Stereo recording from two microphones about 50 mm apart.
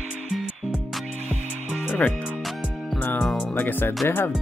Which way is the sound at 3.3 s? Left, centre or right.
Left.